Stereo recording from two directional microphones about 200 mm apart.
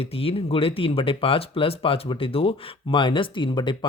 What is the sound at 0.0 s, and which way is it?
Speech, 30° left (ahead or behind).